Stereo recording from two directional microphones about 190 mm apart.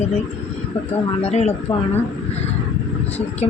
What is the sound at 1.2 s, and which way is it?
Speech, 35° left (ahead or behind).